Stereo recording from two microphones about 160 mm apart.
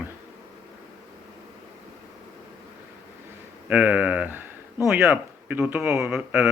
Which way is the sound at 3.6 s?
10° right (ahead or behind).